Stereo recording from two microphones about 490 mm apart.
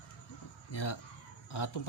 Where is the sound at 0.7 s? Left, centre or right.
Left.